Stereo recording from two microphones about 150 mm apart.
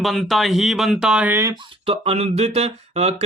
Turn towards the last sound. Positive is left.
turn(degrees=-45)  # may be behind; listen again after turning